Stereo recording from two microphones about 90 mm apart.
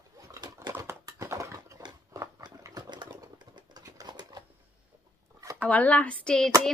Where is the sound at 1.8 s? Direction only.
50° right (ahead or behind).